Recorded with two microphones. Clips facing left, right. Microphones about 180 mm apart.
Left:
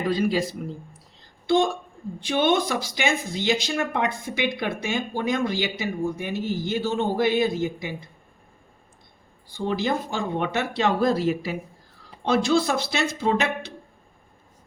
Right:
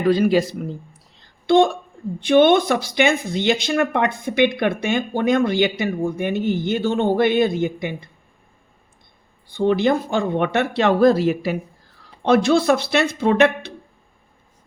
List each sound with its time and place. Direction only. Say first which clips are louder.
0.1 s a man's voice: right 8 dB; 70° right (ahead or behind)
9.5 s speech: right 8 dB; 60° right (ahead or behind)